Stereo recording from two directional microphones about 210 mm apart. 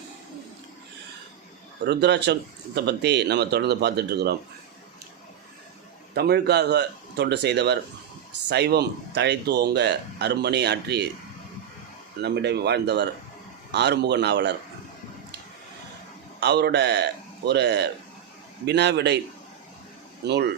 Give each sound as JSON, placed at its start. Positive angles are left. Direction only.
{"t": 1.8, "sound": "a man's voice", "side_deg": -55}
{"t": 6.1, "sound": "speech", "side_deg": -50}
{"t": 12.2, "sound": "speech", "side_deg": -55}
{"t": 16.4, "sound": "a man's voice", "side_deg": -55}
{"t": 20.2, "sound": "a man's voice", "side_deg": -55}